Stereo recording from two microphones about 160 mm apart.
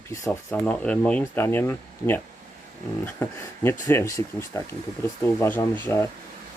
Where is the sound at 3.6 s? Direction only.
15° left (ahead or behind).